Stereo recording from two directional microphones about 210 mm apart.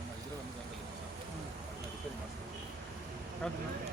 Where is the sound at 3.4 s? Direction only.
5° left (ahead or behind).